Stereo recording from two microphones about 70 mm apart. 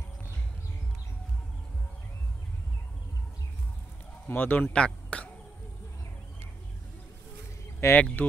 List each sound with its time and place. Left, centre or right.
4.3 s speech: left
7.9 s speech: left